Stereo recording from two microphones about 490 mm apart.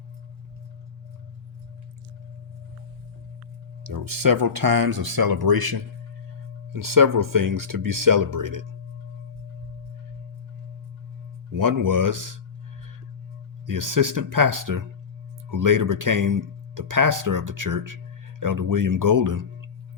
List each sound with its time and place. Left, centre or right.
3.8 s speech: right
6.7 s speech: right
11.5 s speech: right
13.7 s speech: right